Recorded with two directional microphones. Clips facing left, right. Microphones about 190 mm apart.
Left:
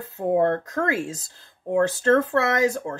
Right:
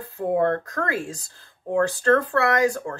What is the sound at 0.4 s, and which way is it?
Speech, 20° left (ahead or behind).